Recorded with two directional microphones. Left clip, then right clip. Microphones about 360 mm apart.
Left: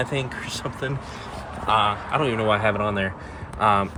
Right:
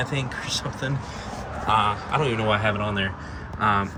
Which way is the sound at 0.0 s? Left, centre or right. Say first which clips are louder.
Left 1 dB; centre.